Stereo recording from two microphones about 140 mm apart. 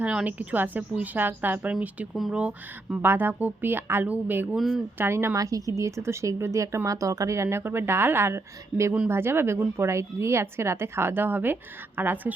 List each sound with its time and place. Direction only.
0.0 s a woman's voice: 10° right (ahead or behind)
2.9 s a woman's voice: 15° right (ahead or behind)
4.5 s speech: centre (ahead or behind)
4.9 s a woman's voice: 20° right (ahead or behind)